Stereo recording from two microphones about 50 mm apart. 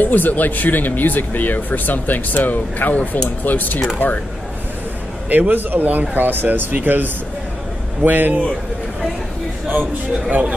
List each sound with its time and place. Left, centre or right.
0.0 s speech: left
5.3 s speech: right